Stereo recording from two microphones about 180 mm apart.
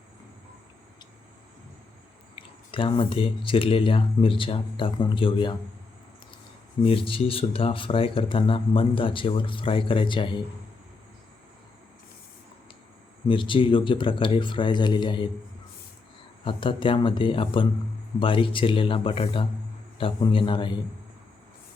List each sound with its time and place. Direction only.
2.3 s speech: 30° left (ahead or behind)
6.8 s speech: 30° left (ahead or behind)
13.2 s speech: 25° left (ahead or behind)
16.4 s speech: 30° left (ahead or behind)